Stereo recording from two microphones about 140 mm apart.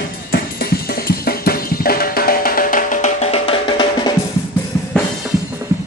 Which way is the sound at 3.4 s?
35° left (ahead or behind).